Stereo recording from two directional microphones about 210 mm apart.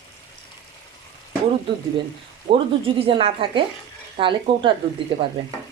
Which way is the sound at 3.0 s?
25° right (ahead or behind).